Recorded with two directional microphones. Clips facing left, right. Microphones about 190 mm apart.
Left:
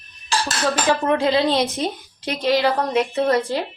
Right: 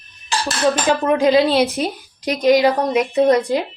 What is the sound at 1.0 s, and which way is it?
A woman's voice, 15° right (ahead or behind).